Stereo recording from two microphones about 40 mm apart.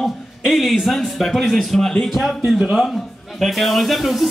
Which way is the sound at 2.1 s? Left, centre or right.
Centre.